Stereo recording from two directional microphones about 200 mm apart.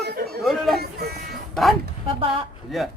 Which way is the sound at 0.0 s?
55° right (ahead or behind).